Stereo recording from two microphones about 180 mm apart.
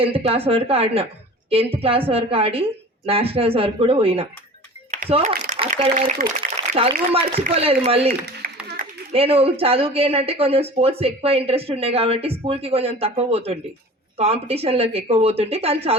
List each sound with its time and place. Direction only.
0.0 s a woman's voice: 30° right (ahead or behind)
6.6 s a sound: 25° right (ahead or behind)
7.4 s a woman's voice: 35° right (ahead or behind)
8.4 s clapping: 55° right (ahead or behind)
8.8 s a woman's voice: 35° right (ahead or behind)